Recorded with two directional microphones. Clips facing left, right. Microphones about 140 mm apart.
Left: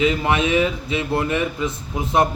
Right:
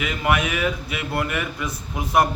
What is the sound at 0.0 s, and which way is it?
A man's voice, 25° left (ahead or behind).